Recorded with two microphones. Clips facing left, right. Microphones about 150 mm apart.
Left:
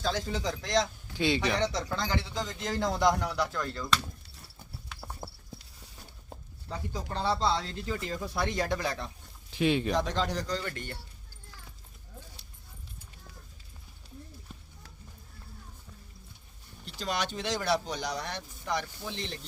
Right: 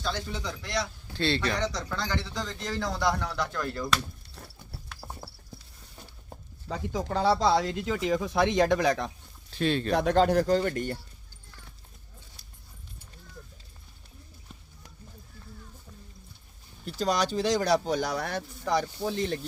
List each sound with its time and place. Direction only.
0.2 s a man's voice: 40° left (ahead or behind)
1.1 s speech: 15° left (ahead or behind)
1.6 s a man's voice: 25° left (ahead or behind); by 3.6 s 10° left (ahead or behind)
3.6 s speech: 5° right (ahead or behind)
5.2 s clip-clop: 20° left (ahead or behind)
6.7 s speech: 85° right; by 7.7 s 70° right (ahead or behind)
7.8 s speech: 90° right
8.8 s speech: 75° right (ahead or behind)
9.5 s speech: 15° left (ahead or behind)
9.9 s speech: 60° right (ahead or behind); by 10.9 s 45° right (ahead or behind)
16.8 s speech: 40° right (ahead or behind)
18.7 s speech: 35° right (ahead or behind)